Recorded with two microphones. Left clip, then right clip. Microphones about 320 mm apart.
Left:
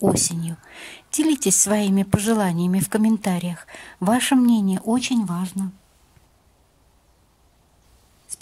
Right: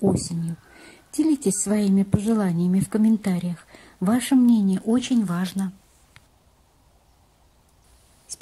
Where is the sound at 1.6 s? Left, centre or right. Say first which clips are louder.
Left 3 dB; left.